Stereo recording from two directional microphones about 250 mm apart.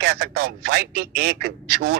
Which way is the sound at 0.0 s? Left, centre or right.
Right.